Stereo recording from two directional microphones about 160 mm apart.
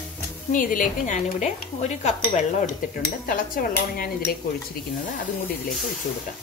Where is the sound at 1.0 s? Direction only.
45° left (ahead or behind).